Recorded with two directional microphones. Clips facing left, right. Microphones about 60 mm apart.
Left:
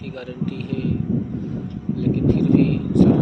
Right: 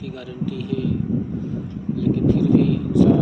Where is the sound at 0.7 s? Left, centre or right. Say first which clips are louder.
Right 1 dB; left.